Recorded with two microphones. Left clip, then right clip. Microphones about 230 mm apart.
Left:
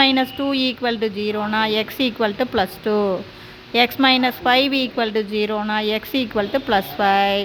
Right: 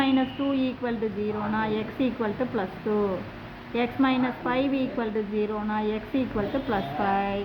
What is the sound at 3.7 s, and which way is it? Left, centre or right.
A woman's voice, left.